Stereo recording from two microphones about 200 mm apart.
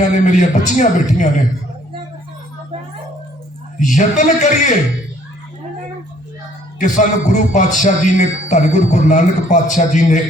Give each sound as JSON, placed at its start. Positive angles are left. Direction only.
{"t": 0.1, "sound": "a man's voice", "side_deg": 40}
{"t": 3.8, "sound": "a man's voice", "side_deg": 40}
{"t": 6.7, "sound": "a man's voice", "side_deg": 40}